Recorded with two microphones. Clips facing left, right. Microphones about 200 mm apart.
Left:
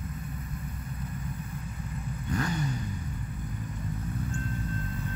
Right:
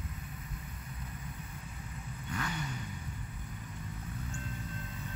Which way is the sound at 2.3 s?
40° left (ahead or behind).